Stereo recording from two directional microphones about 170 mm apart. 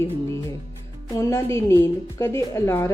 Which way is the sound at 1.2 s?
15° left (ahead or behind).